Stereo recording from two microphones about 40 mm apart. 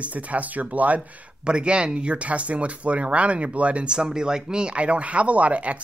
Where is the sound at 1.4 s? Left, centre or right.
Right.